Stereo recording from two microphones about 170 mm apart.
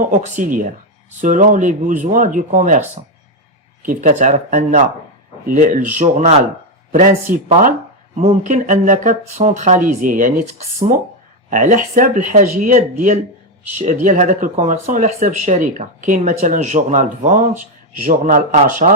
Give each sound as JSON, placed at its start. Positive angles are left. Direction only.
{"t": 0.0, "sound": "speech", "side_deg": -50}